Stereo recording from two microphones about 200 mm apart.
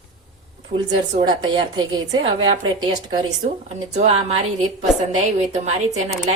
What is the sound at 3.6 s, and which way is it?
A woman's voice, 35° right (ahead or behind).